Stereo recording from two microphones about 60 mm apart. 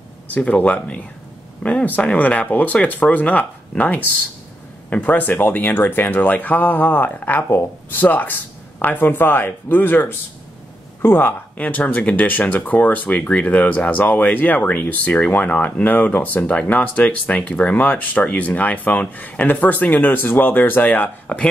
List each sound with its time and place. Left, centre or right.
0.3 s a man's voice: left
11.5 s speech: left
21.3 s speech: centre